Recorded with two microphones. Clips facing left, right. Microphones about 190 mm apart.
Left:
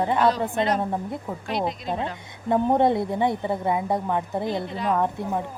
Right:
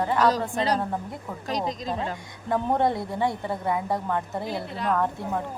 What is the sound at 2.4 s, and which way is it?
A woman's voice, 20° left (ahead or behind).